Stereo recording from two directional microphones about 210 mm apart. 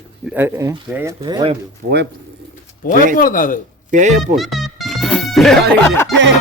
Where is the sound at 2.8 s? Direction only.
45° left (ahead or behind).